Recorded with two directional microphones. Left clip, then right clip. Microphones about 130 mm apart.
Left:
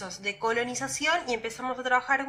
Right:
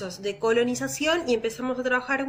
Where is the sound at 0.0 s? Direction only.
30° right (ahead or behind).